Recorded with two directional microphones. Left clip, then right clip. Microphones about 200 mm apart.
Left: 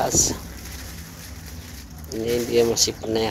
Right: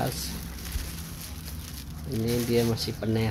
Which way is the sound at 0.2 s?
30° left (ahead or behind).